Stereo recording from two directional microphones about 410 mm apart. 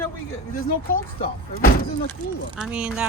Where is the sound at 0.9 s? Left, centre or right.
Centre.